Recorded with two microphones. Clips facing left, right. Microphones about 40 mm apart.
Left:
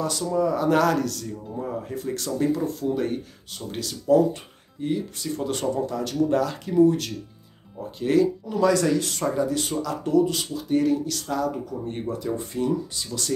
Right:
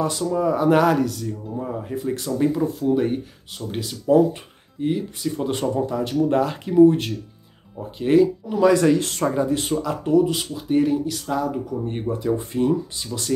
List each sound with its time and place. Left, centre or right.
0.3 s speech: right